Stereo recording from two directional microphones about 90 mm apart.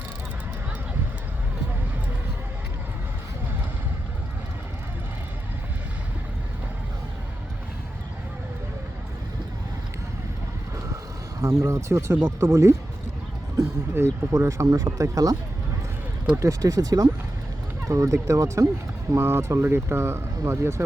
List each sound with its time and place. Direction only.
11.3 s speech: 35° right (ahead or behind)
13.9 s speech: 30° right (ahead or behind)